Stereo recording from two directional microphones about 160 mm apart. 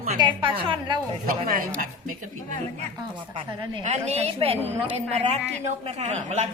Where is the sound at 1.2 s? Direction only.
60° right (ahead or behind).